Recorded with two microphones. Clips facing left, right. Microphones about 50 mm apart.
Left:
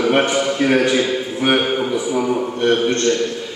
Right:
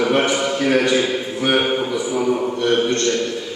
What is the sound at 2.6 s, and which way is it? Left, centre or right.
Speech, left.